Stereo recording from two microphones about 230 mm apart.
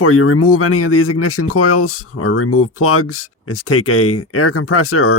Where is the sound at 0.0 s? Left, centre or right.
Left.